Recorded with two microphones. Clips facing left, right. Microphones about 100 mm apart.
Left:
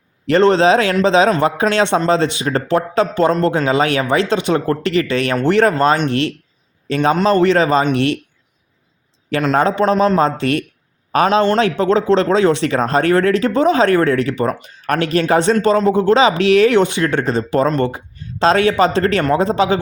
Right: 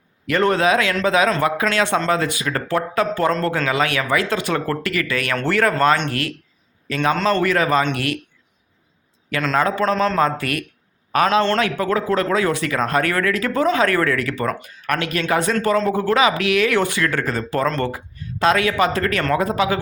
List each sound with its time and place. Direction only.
0.3 s a man's voice: 25° left (ahead or behind)
9.6 s speech: 30° left (ahead or behind)
15.5 s speech: 20° left (ahead or behind)